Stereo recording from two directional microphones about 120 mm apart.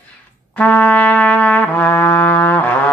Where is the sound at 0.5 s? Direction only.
10° left (ahead or behind).